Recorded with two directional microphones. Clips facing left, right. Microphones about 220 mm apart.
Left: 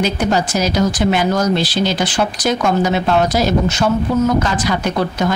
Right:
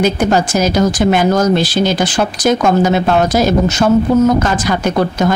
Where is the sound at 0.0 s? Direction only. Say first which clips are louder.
Right 4 dB; 50° right (ahead or behind).